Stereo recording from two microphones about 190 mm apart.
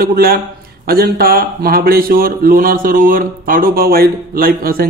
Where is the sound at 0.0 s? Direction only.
50° right (ahead or behind).